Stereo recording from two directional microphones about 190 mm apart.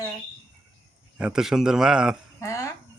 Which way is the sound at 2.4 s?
15° left (ahead or behind).